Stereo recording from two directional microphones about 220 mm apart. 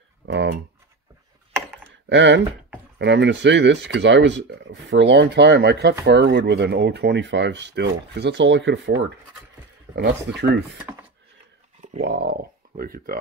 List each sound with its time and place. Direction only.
0.3 s speech: 50° right (ahead or behind)
2.0 s speech: 55° right (ahead or behind)
12.0 s speech: 45° right (ahead or behind)